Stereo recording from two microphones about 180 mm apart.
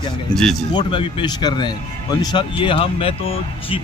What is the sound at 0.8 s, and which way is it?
Speech, 25° left (ahead or behind).